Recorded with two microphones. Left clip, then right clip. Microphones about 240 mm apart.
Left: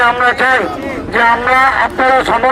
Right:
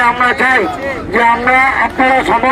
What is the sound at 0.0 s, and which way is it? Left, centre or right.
A man's voice, centre.